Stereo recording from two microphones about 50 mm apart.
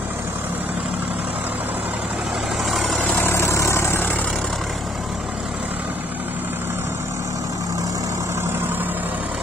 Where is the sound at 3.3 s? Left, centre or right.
Left.